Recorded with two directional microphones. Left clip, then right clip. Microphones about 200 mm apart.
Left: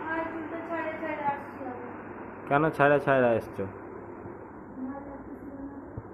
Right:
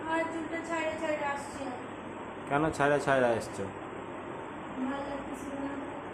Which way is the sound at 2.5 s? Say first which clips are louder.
Left 5 dB; 5° left (ahead or behind).